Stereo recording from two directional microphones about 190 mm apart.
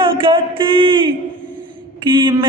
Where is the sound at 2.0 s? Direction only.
25° right (ahead or behind).